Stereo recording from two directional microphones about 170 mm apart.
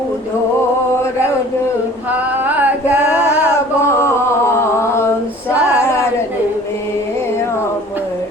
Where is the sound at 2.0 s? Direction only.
10° right (ahead or behind).